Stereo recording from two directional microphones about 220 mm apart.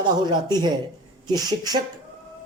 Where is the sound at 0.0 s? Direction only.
20° right (ahead or behind).